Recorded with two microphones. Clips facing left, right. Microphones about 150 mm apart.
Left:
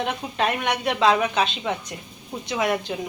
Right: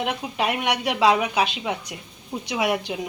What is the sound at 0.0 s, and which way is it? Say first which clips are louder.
Speech: even; 10° right (ahead or behind).